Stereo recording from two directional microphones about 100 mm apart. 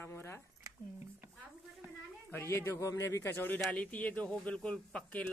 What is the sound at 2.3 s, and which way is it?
Speech, 25° left (ahead or behind).